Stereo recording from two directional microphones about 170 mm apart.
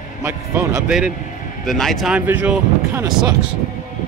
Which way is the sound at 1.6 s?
Centre (ahead or behind).